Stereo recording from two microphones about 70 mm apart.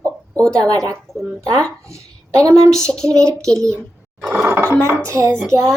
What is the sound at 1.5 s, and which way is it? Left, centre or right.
Speech, centre.